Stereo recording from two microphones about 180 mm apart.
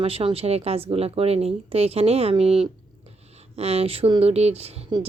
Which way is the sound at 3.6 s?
35° right (ahead or behind).